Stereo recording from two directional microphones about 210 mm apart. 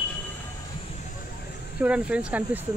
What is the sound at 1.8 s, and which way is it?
Speech, 5° right (ahead or behind).